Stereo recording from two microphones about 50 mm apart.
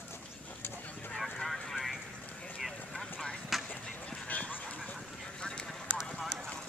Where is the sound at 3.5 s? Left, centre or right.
Centre.